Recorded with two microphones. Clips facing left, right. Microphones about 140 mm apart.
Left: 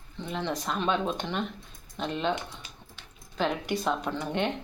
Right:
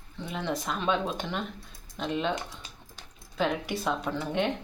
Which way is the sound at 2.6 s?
40° right (ahead or behind).